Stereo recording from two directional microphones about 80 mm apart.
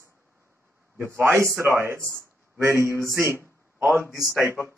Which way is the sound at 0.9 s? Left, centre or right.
Right.